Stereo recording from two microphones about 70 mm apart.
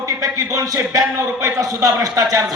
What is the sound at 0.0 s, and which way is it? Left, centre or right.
A man's voice, right.